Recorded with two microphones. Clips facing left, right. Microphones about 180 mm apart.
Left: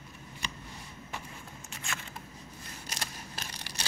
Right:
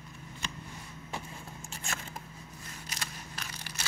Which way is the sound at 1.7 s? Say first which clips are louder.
Even; 40° right (ahead or behind).